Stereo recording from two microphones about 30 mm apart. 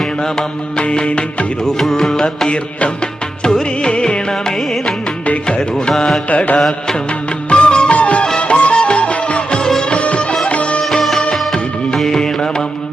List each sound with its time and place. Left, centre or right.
0.8 s music: left
1.8 s music: centre
3.4 s music: left
4.3 s music: centre
5.5 s music: left
6.3 s music: left
6.6 s music: centre
7.5 s music: left
7.9 s music: left
11.9 s music: centre
12.2 s music: left